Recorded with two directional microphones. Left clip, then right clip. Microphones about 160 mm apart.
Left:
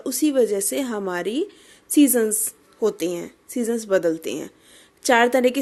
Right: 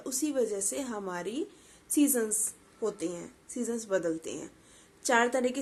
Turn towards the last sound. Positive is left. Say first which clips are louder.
# left 10 dB
turn(degrees=50)  # may be behind; listen again after turning